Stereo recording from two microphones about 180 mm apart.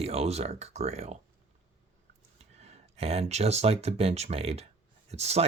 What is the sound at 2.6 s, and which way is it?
Speech, 35° right (ahead or behind).